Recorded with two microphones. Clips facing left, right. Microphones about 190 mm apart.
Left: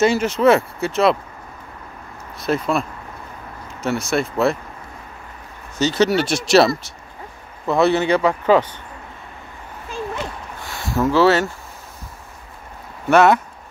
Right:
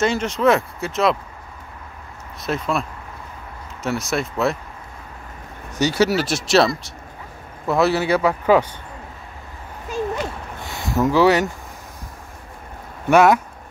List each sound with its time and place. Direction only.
0.0 s speech: 5° left (ahead or behind)
2.4 s speech: centre (ahead or behind)
3.8 s speech: centre (ahead or behind)
5.8 s speech: 10° right (ahead or behind)
10.6 s a sound: 20° right (ahead or behind)
13.1 s speech: 10° right (ahead or behind)